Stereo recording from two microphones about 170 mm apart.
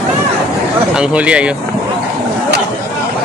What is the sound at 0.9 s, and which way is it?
Speech, 5° right (ahead or behind).